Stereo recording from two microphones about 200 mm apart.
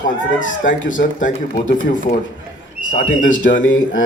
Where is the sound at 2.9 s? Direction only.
40° left (ahead or behind).